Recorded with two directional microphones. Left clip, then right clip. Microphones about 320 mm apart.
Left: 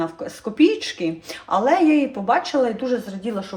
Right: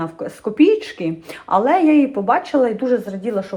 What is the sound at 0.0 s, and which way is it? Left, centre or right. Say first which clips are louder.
Speech: right 2 dB; centre.